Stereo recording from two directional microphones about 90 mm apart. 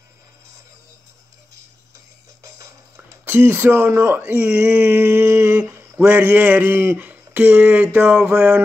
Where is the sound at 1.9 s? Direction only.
35° right (ahead or behind).